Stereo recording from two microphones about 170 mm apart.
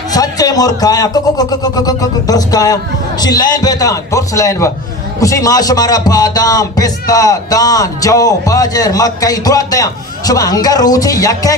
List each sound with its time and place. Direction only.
0.1 s speech: 20° left (ahead or behind)